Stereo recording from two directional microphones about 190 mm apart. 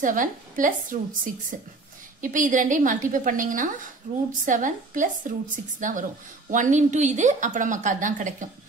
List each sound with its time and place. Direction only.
0.0 s a woman's voice: 45° right (ahead or behind)